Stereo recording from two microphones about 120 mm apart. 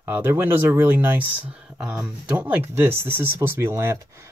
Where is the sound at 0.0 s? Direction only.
20° right (ahead or behind).